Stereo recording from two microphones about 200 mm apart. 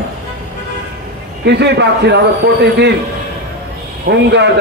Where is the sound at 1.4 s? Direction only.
55° right (ahead or behind).